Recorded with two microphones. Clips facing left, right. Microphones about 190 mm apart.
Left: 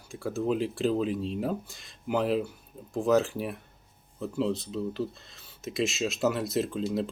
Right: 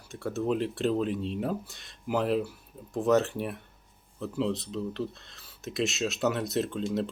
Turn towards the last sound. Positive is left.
turn(degrees=0)  # may be behind; listen again after turning